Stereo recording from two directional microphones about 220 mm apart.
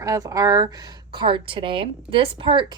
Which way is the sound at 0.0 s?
15° right (ahead or behind).